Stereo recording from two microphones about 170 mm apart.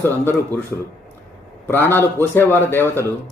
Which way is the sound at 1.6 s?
10° left (ahead or behind).